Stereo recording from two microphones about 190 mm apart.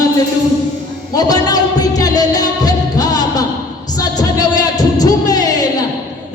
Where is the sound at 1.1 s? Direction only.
20° left (ahead or behind).